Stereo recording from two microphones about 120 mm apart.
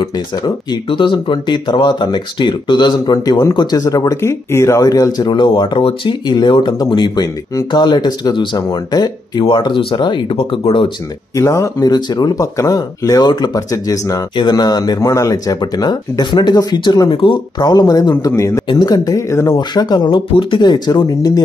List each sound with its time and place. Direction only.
0.8 s speech: 45° left (ahead or behind)
11.3 s speech: 25° left (ahead or behind)
19.7 s speech: 35° left (ahead or behind)